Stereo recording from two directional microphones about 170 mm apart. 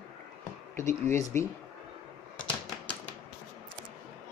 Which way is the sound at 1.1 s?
15° left (ahead or behind).